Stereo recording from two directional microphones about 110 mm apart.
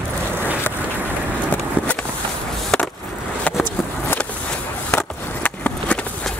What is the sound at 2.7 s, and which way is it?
Skateboard, 5° left (ahead or behind).